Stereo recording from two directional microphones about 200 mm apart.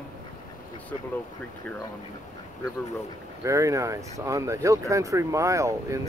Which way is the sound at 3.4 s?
15° right (ahead or behind).